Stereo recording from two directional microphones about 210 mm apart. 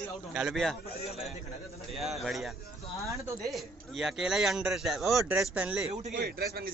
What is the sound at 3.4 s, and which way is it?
A man's voice, centre (ahead or behind).